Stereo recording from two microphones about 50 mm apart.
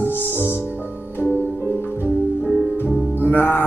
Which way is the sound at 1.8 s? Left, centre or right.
Left.